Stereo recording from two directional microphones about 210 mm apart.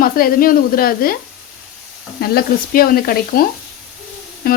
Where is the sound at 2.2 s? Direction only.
45° left (ahead or behind).